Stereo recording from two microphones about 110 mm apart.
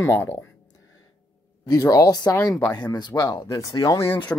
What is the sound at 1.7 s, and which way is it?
Speech, 35° left (ahead or behind).